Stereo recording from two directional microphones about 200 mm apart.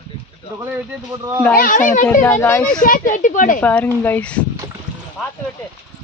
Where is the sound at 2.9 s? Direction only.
40° left (ahead or behind).